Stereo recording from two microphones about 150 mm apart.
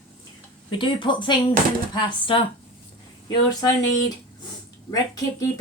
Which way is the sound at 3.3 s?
25° left (ahead or behind).